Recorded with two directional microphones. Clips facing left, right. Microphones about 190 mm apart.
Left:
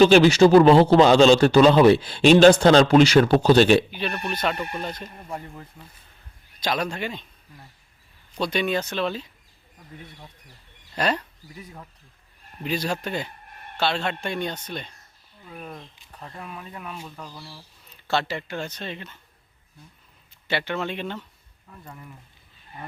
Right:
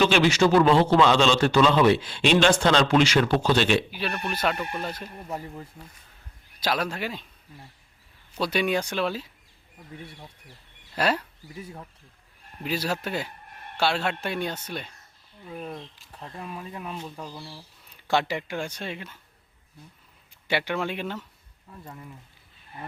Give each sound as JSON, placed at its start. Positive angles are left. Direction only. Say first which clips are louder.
{"t": 0.0, "sound": "a man's voice", "louder": "left 6 dB", "side_deg": 35}
{"t": 4.3, "sound": "speech", "louder": "right 1 dB", "side_deg": -5}
{"t": 8.3, "sound": "speech", "louder": "even", "side_deg": -10}
{"t": 12.6, "sound": "speech", "louder": "left 1 dB", "side_deg": -5}
{"t": 16.7, "sound": "speech", "louder": "right 2 dB", "side_deg": -20}
{"t": 20.5, "sound": "speech", "louder": "even", "side_deg": -10}